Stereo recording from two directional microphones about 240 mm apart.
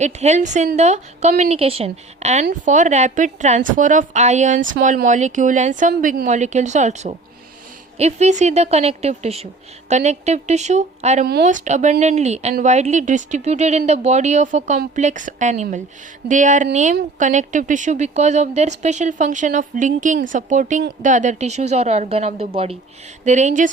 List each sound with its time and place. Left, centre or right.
0.0 s a woman's voice: right